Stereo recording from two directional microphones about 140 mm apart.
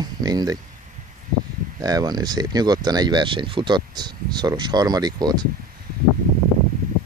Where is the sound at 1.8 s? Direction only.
25° right (ahead or behind).